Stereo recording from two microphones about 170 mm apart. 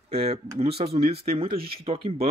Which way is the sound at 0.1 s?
40° right (ahead or behind).